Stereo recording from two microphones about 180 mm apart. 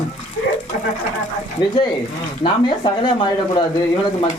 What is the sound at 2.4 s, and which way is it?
Speech, 25° left (ahead or behind).